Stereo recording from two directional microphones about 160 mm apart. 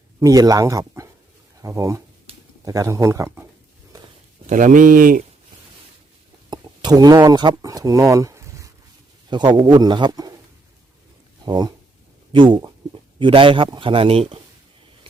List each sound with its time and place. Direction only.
0.2 s a man's voice: 20° right (ahead or behind)
2.3 s a sound: 35° right (ahead or behind)
2.6 s a man's voice: 20° right (ahead or behind)
4.4 s speech: 55° right (ahead or behind)
6.5 s a man's voice: 25° right (ahead or behind)
11.4 s a man's voice: 25° right (ahead or behind)